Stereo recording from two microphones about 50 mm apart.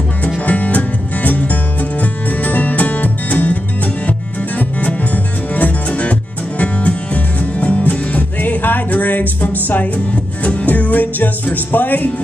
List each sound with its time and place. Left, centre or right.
0.5 s music: left